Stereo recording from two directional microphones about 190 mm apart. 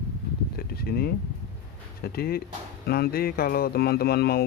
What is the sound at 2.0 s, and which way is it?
Speech, 55° left (ahead or behind).